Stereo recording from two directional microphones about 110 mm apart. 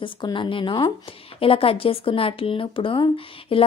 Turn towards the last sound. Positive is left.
turn(degrees=55)  # may be behind; listen again after turning